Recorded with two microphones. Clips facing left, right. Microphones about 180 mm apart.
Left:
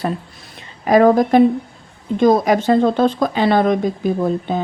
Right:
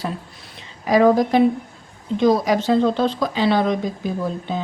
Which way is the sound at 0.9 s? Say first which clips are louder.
Left 3 dB; 50° left (ahead or behind).